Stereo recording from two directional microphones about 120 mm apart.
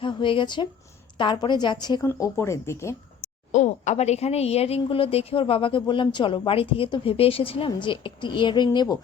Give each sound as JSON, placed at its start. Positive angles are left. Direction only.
{"t": 0.0, "sound": "a woman's voice", "side_deg": 45}
{"t": 2.0, "sound": "speech", "side_deg": 25}
{"t": 3.2, "sound": "a woman's voice", "side_deg": 90}